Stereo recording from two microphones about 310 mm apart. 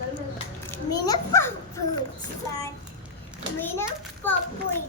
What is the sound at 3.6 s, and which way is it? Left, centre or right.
Speech, centre.